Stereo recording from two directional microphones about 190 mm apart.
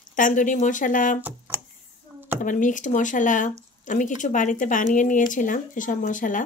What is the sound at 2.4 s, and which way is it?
Speech, 40° left (ahead or behind).